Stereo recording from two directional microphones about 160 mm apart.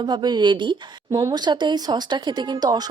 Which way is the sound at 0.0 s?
25° right (ahead or behind).